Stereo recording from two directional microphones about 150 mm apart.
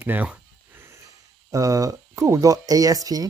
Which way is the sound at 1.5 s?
25° right (ahead or behind).